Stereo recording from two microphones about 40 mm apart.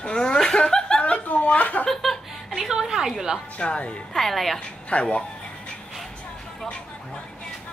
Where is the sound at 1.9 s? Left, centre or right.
Centre.